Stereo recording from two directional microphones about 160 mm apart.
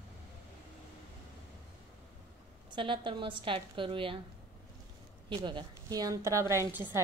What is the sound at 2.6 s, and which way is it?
A woman's voice, 30° right (ahead or behind).